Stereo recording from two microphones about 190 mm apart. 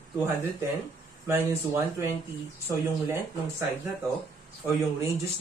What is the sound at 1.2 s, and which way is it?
Speech, 10° right (ahead or behind).